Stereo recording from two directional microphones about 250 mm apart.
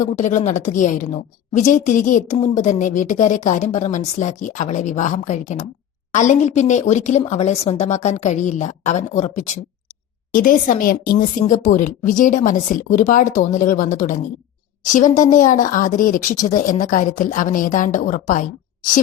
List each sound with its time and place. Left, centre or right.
0.0 s a woman's voice: left